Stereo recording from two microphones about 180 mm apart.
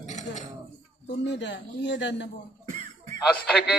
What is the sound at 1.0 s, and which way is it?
A man's voice, 75° left (ahead or behind).